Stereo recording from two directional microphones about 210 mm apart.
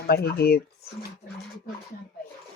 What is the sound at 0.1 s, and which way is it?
Speech, 50° left (ahead or behind).